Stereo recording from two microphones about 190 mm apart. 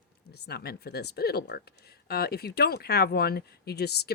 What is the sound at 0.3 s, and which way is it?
Speech, 60° left (ahead or behind).